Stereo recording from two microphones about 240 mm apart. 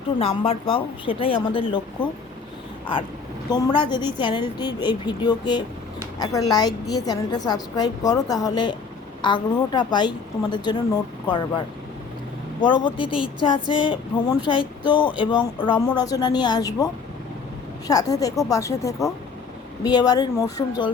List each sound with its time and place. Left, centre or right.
0.2 s speech: left
3.5 s a woman's voice: centre
12.6 s a woman's voice: centre